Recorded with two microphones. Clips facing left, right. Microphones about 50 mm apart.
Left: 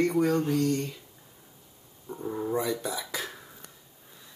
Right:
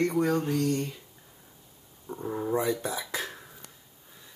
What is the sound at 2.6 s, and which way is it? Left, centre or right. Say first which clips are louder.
Speech: right 1 dB; right.